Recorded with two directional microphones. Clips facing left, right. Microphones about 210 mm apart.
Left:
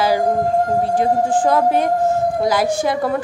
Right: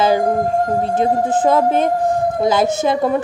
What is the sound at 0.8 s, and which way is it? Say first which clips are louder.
Speech: even; 20° right (ahead or behind).